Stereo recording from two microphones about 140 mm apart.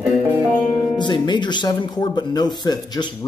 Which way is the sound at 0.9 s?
35° left (ahead or behind).